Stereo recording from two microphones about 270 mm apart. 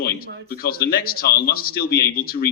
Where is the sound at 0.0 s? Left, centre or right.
Left.